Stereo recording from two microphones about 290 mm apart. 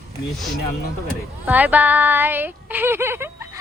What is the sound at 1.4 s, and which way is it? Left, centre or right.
Speech, centre.